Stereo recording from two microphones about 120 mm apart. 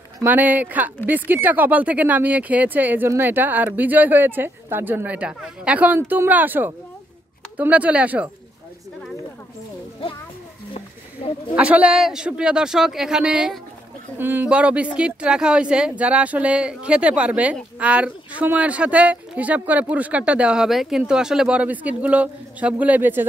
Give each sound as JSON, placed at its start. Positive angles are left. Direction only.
{"t": 0.2, "sound": "speech", "side_deg": -15}
{"t": 11.2, "sound": "a sound", "side_deg": 50}
{"t": 11.5, "sound": "speech", "side_deg": -10}